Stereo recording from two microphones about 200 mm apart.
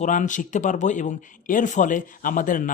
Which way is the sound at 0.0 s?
40° left (ahead or behind).